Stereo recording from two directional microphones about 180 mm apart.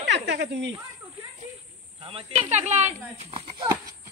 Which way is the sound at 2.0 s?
30° right (ahead or behind).